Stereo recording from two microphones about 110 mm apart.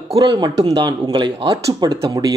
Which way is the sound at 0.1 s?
45° right (ahead or behind).